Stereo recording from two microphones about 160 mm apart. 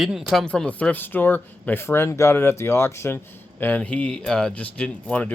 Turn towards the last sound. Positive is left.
turn(degrees=10)  # may be behind; listen again after turning